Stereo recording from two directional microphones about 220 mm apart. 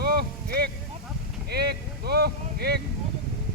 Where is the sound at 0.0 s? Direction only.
45° right (ahead or behind).